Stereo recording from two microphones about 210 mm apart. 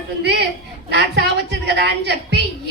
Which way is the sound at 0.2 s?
50° right (ahead or behind).